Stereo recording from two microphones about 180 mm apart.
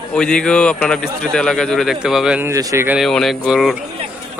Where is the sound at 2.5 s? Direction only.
20° right (ahead or behind).